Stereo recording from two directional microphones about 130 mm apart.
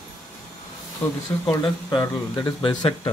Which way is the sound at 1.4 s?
30° left (ahead or behind).